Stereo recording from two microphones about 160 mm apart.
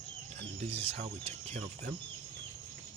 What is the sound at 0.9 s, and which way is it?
Speech, 40° right (ahead or behind).